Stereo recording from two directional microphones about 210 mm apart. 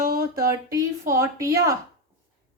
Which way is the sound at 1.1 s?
15° right (ahead or behind).